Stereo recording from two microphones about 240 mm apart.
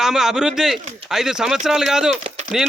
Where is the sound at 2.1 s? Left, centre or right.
Right.